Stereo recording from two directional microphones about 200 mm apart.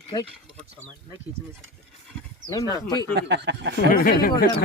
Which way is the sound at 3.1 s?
60° right (ahead or behind).